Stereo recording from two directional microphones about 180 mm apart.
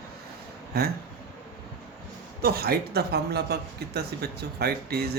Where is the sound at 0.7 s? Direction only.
60° right (ahead or behind).